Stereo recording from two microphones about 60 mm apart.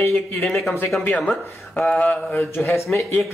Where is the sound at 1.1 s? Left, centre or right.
Left.